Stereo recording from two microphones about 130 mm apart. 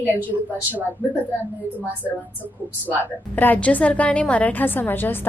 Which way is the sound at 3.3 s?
15° left (ahead or behind).